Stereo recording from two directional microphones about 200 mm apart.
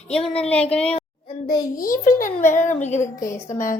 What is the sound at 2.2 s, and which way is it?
Speech, 40° left (ahead or behind).